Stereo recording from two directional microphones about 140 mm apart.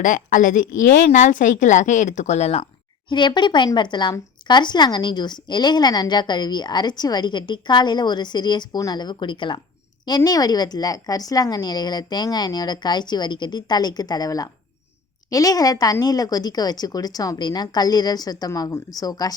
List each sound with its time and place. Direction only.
0.0 s speech: 65° left (ahead or behind); by 2.6 s 50° left (ahead or behind)
3.1 s a woman's voice: 35° left (ahead or behind)